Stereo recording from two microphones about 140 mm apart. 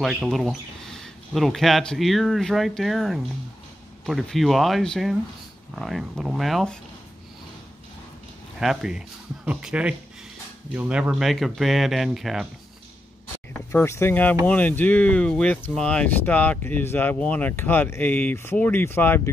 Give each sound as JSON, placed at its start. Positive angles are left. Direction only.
{"t": 0.0, "sound": "speech", "side_deg": 0}
{"t": 8.5, "sound": "speech", "side_deg": -5}
{"t": 13.7, "sound": "speech", "side_deg": 20}